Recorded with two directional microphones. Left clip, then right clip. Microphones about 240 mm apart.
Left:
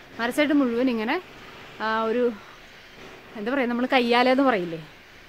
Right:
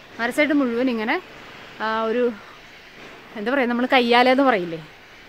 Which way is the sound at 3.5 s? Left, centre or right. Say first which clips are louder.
Right 4 dB; centre.